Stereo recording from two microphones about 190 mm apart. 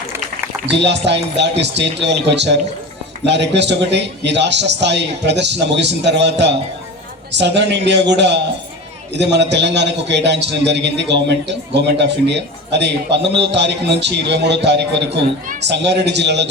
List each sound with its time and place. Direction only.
0.7 s a man's voice: 65° right (ahead or behind)